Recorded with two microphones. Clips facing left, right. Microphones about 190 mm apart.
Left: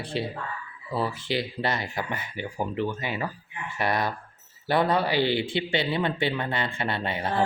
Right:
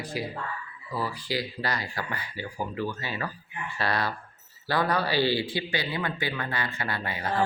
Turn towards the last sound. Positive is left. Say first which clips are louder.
# left 3 dB
turn(degrees=25)  # may be behind; listen again after turning